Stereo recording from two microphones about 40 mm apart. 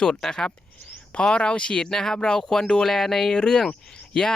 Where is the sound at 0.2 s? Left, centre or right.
Centre.